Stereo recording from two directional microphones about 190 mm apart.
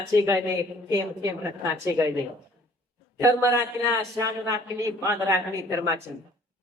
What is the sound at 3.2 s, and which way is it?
A woman's voice, 15° right (ahead or behind).